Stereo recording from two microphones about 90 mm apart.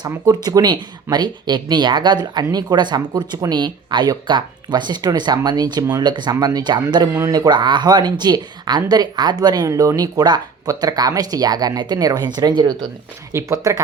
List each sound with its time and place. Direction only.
0.4 s speech: 50° right (ahead or behind)
13.3 s speech: 35° right (ahead or behind)